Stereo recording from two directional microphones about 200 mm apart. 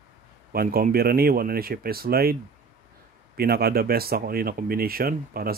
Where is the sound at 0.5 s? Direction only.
50° right (ahead or behind).